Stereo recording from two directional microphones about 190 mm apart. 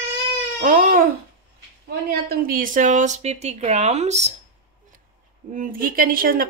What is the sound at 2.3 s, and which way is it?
Speech, 45° right (ahead or behind).